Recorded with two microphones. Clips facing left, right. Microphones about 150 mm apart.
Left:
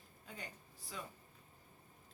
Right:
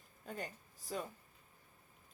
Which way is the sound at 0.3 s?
45° right (ahead or behind).